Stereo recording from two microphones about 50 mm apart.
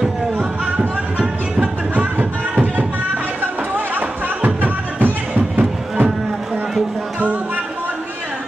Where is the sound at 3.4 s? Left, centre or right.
Right.